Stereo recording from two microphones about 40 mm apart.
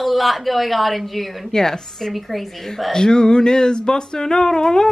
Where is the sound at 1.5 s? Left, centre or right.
Centre.